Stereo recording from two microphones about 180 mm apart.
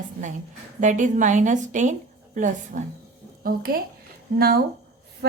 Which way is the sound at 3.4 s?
55° right (ahead or behind).